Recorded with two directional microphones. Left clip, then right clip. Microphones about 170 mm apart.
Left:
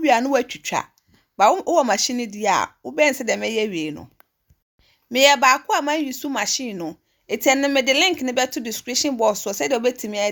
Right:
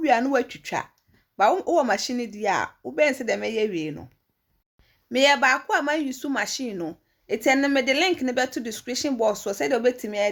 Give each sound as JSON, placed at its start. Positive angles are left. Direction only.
{"t": 0.0, "sound": "a woman's voice", "side_deg": 30}
{"t": 5.0, "sound": "a woman's voice", "side_deg": 25}